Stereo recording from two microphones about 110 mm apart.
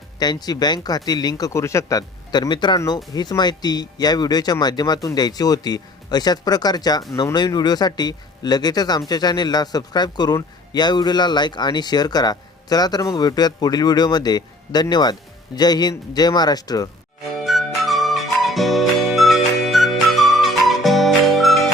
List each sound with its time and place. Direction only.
0.2 s speech: 40° left (ahead or behind)
17.3 s music: centre (ahead or behind)